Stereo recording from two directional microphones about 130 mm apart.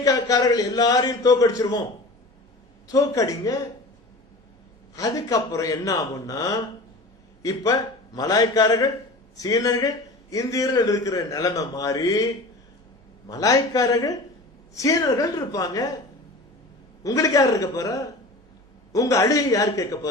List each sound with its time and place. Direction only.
0.0 s a man's voice: 30° left (ahead or behind)
2.8 s a man's voice: 25° left (ahead or behind)
4.9 s a man's voice: 25° left (ahead or behind)
17.0 s a man's voice: 25° left (ahead or behind)